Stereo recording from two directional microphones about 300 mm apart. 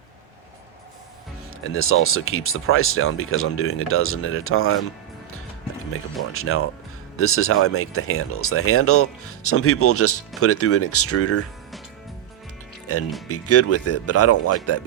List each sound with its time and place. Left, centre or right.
1.6 s speech: left
6.3 s speech: left
12.9 s speech: left